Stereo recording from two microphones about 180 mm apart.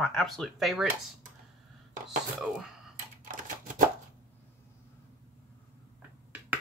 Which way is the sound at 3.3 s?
45° right (ahead or behind).